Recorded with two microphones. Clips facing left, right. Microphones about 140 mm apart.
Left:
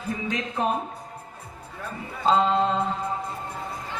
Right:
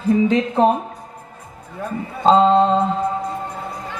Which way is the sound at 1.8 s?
30° right (ahead or behind).